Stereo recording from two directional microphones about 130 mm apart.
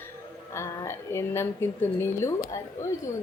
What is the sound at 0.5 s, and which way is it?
A woman's voice, 20° left (ahead or behind).